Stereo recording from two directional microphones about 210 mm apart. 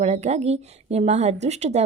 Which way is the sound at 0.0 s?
30° right (ahead or behind).